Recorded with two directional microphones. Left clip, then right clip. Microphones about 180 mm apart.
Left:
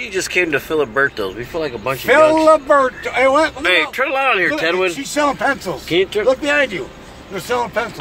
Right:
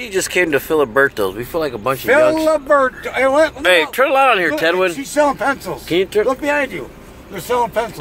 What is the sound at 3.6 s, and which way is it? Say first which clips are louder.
Speech: right 2 dB; 60° right (ahead or behind).